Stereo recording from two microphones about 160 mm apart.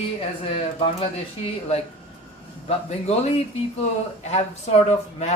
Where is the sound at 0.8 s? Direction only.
35° left (ahead or behind).